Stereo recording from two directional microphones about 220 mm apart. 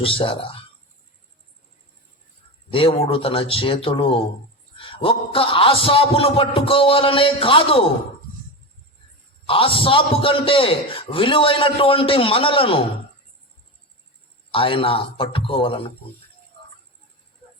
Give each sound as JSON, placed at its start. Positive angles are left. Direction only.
{"t": 0.0, "sound": "a man's voice", "side_deg": 25}
{"t": 2.6, "sound": "a man's voice", "side_deg": 25}
{"t": 9.5, "sound": "a man's voice", "side_deg": 25}
{"t": 14.5, "sound": "a man's voice", "side_deg": 25}